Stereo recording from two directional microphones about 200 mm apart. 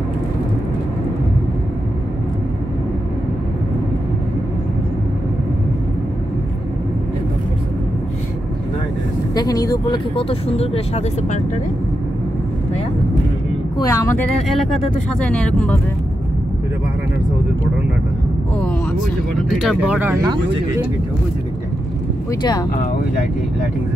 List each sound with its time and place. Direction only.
9.3 s speech: 20° left (ahead or behind)
13.7 s speech: 15° left (ahead or behind)
14.5 s speech: centre (ahead or behind)
19.5 s speech: centre (ahead or behind)
22.4 s speech: 20° left (ahead or behind)